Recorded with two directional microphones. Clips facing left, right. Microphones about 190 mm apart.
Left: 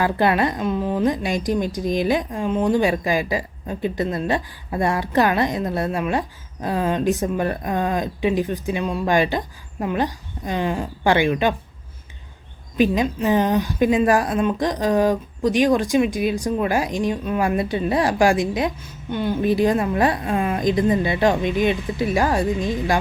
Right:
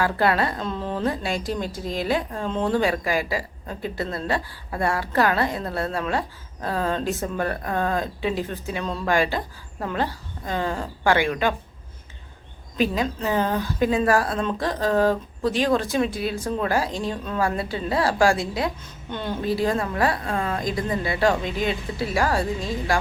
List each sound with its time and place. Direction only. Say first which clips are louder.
0.0 s a woman's voice: left 3 dB; 20° left (ahead or behind)
12.7 s a woman's voice: left 5 dB; 20° left (ahead or behind)